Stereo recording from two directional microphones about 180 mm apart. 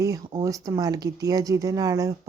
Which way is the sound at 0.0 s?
20° right (ahead or behind).